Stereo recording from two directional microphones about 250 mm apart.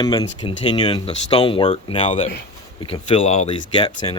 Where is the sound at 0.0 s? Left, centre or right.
Centre.